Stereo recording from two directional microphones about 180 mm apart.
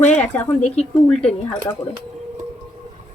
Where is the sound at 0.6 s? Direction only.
40° left (ahead or behind).